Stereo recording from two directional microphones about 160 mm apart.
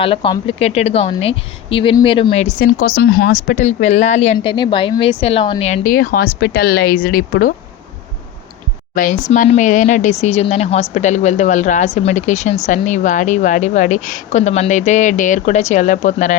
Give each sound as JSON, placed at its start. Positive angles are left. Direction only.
{"t": 0.0, "sound": "a woman's voice", "side_deg": 35}
{"t": 2.8, "sound": "a woman's voice", "side_deg": 65}
{"t": 4.5, "sound": "a woman's voice", "side_deg": 30}
{"t": 9.0, "sound": "a woman's voice", "side_deg": 55}